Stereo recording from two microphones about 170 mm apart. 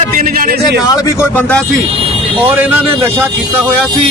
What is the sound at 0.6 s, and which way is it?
Speech, 20° left (ahead or behind).